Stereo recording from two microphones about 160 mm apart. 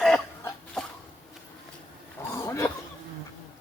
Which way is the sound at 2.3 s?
20° left (ahead or behind).